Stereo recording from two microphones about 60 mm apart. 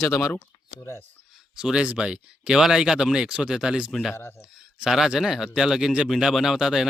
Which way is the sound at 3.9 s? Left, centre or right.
Centre.